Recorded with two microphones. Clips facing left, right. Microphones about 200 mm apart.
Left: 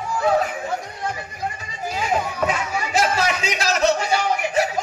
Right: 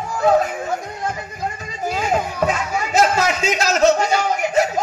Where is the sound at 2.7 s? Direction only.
45° right (ahead or behind).